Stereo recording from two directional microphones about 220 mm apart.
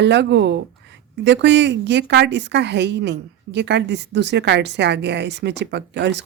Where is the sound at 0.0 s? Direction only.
50° right (ahead or behind).